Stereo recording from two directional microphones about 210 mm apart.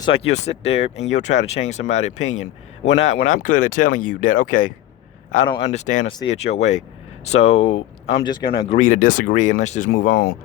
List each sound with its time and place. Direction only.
0.0 s speech: 30° left (ahead or behind)
1.4 s speech: 60° left (ahead or behind)
1.9 s speech: 35° left (ahead or behind)
5.5 s speech: 25° left (ahead or behind)
8.8 s speech: 40° left (ahead or behind)